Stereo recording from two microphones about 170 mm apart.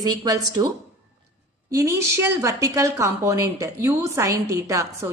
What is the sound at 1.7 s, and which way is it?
A woman's voice, 15° right (ahead or behind).